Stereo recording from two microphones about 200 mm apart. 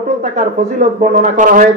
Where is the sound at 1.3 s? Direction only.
40° right (ahead or behind).